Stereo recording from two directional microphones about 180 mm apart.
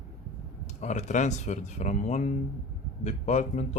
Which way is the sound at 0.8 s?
40° left (ahead or behind).